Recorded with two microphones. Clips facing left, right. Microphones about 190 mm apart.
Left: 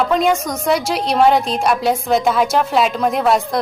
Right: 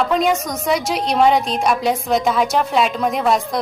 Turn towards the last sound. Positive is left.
turn(degrees=0)  # may be behind; listen again after turning